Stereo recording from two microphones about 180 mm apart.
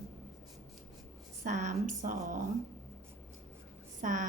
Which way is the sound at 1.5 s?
40° right (ahead or behind).